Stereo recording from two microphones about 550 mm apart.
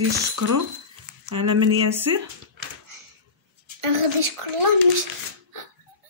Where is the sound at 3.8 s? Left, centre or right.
Right.